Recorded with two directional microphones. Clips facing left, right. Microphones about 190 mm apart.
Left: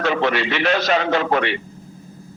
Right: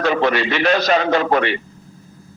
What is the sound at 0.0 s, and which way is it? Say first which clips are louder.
A man's voice: right 2 dB; 40° right (ahead or behind).